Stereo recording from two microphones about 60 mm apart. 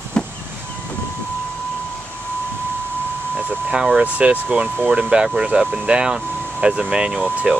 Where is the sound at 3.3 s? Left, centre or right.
Right.